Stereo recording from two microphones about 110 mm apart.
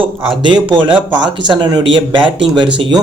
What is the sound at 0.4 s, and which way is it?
Speech, 45° right (ahead or behind).